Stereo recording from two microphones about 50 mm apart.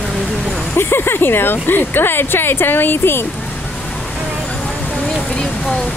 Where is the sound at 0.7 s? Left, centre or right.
Left.